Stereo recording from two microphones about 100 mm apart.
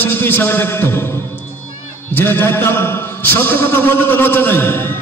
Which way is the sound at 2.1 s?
20° left (ahead or behind).